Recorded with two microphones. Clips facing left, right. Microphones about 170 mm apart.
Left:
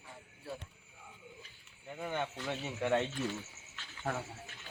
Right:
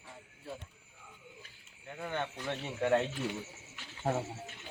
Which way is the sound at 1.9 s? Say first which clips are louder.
Even; 10° left (ahead or behind).